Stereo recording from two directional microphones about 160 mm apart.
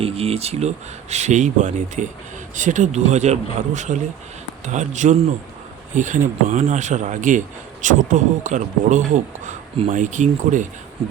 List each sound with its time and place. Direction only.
0.0 s a man's voice: 40° right (ahead or behind)